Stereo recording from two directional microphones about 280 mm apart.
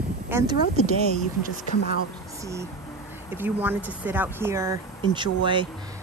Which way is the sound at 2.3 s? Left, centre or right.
Centre.